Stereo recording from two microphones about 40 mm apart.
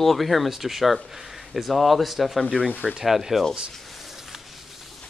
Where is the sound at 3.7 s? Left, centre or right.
Centre.